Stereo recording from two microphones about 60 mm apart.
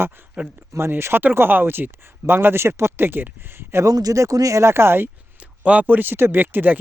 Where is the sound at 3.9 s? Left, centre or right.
Right.